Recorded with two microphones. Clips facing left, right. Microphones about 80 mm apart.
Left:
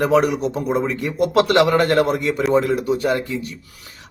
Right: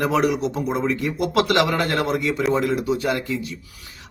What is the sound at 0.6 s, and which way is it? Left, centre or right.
Speech, centre.